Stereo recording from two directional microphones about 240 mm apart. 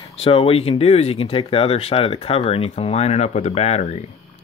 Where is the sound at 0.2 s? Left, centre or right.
Left.